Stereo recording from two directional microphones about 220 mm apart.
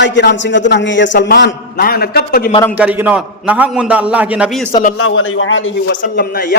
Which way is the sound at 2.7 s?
5° right (ahead or behind).